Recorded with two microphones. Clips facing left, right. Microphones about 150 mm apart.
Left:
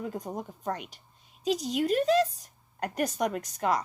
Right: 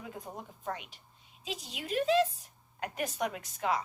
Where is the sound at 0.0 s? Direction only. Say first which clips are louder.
Left 8 dB; 45° left (ahead or behind).